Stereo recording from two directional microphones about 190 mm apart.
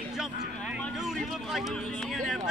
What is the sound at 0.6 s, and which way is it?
Vehicle, centre (ahead or behind).